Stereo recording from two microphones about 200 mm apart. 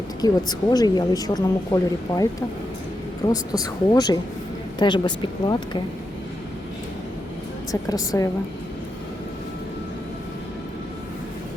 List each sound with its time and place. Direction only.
0.2 s speech: 20° left (ahead or behind)
3.2 s speech: 20° left (ahead or behind)
7.7 s speech: 15° left (ahead or behind)